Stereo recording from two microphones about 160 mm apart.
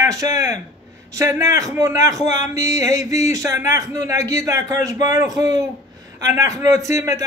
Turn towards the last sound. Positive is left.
turn(degrees=-20)  # may be behind; listen again after turning